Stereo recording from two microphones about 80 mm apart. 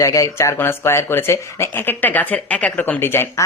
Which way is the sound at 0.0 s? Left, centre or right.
Left.